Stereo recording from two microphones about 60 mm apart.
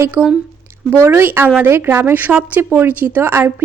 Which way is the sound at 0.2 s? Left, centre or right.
Right.